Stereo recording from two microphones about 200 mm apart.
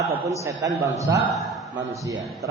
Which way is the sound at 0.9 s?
15° right (ahead or behind).